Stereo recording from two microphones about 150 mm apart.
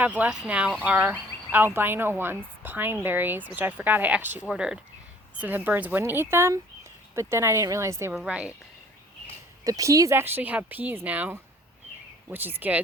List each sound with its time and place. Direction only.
0.0 s a woman's voice: 10° right (ahead or behind)
8.1 s a woman's voice: 5° right (ahead or behind)
9.6 s a woman's voice: 20° right (ahead or behind)